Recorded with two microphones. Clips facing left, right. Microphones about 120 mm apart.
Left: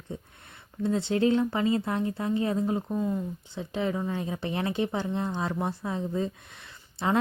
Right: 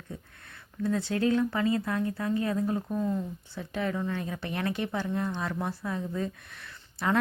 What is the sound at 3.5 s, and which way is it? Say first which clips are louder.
Speech: left 2 dB; 25° left (ahead or behind).